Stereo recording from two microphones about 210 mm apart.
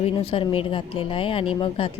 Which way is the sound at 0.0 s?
25° left (ahead or behind).